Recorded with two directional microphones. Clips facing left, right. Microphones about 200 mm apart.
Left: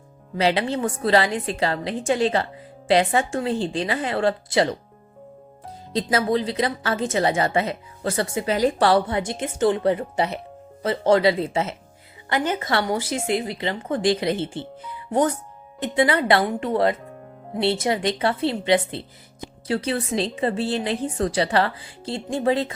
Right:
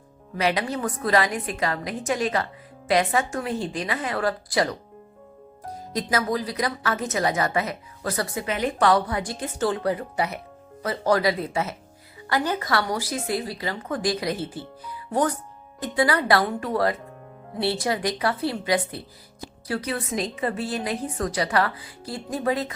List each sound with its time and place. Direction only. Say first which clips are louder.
0.3 s speech: left 3 dB; 30° left (ahead or behind)
5.9 s speech: left 4 dB; 30° left (ahead or behind)